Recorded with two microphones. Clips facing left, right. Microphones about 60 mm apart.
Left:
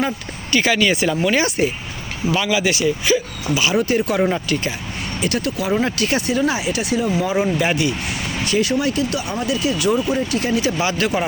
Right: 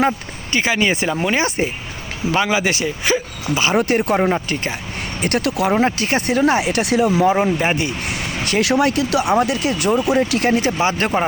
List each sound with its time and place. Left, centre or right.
0.5 s speech: right
3.8 s speech: right
4.3 s speech: right
5.4 s speech: right
5.7 s speech: right
6.5 s speech: right
7.2 s speech: right
8.0 s speech: right
9.3 s speech: right
10.5 s speech: right
10.8 s speech: right